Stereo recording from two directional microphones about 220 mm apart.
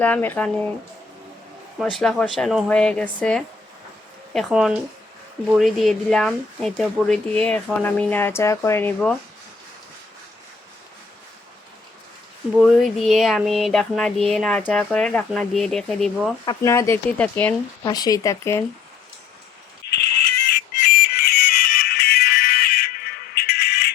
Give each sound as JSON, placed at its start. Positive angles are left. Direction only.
{"t": 0.0, "sound": "speech", "side_deg": 5}
{"t": 1.8, "sound": "speech", "side_deg": 5}
{"t": 12.5, "sound": "speech", "side_deg": 0}
{"t": 16.5, "sound": "speech", "side_deg": 15}
{"t": 17.8, "sound": "speech", "side_deg": 15}
{"t": 20.2, "sound": "music", "side_deg": 50}